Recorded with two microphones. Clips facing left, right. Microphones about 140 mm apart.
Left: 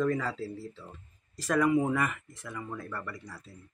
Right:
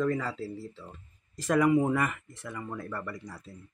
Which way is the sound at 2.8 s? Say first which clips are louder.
Right 2 dB; 15° right (ahead or behind).